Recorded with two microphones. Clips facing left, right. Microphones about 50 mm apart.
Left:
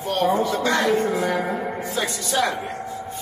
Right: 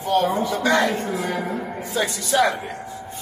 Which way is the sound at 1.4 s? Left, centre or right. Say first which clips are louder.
Left 2 dB; left.